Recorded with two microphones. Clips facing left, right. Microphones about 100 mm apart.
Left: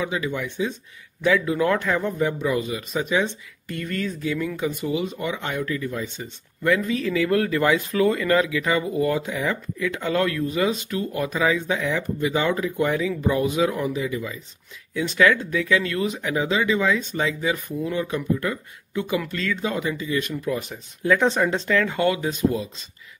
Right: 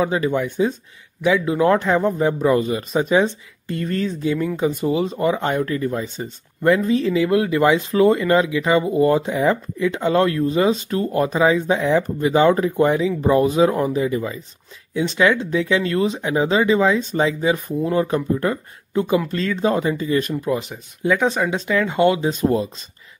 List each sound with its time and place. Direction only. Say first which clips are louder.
0.0 s speech: right 7 dB; 40° right (ahead or behind)
1.2 s a man's voice: right 3 dB; 25° right (ahead or behind)
13.2 s speech: right 7 dB; 35° right (ahead or behind)
15.0 s speech: right 2 dB; 25° right (ahead or behind); by 20.4 s 40° right (ahead or behind)
20.7 s speech: right 1 dB; 15° right (ahead or behind)
21.2 s speech: right 1 dB; 5° right (ahead or behind); by 22.3 s 25° right (ahead or behind)
22.3 s speech: right 4 dB; 45° right (ahead or behind)